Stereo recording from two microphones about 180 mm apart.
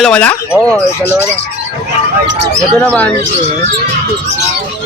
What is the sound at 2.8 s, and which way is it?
Speech, 10° left (ahead or behind).